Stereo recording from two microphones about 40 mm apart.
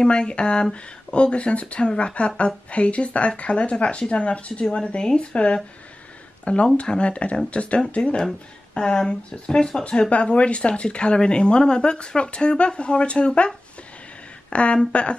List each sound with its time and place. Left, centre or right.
0.0 s speech: left
14.5 s speech: left